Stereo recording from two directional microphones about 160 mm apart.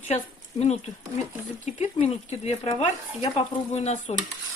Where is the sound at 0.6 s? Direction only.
45° left (ahead or behind).